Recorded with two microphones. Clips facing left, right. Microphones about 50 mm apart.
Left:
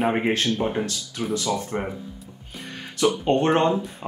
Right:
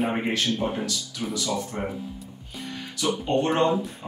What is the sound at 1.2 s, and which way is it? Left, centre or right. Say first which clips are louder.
Speech: left 4 dB; left.